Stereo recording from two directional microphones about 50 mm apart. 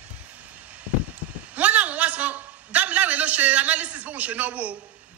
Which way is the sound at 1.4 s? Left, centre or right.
Right.